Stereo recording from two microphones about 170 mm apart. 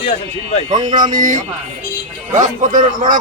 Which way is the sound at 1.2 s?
45° right (ahead or behind).